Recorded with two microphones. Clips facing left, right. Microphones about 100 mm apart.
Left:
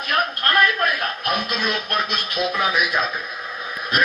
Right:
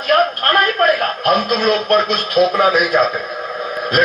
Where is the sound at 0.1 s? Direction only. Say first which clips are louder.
Right 8 dB; 40° right (ahead or behind).